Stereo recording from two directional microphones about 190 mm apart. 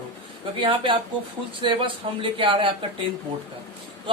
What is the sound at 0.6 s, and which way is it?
A woman's voice, 25° right (ahead or behind).